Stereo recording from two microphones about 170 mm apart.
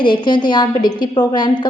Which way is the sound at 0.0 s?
25° left (ahead or behind).